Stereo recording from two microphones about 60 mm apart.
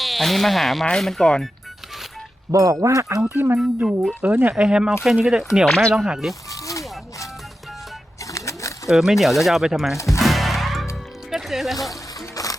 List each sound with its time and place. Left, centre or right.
0.0 s speech: centre
2.5 s speech: right
3.2 s speech: right
4.2 s speech: right
4.5 s speech: centre
5.6 s speech: centre
6.5 s music: left
8.2 s a sound: left
8.9 s speech: centre
10.2 s music: centre
12.4 s music: left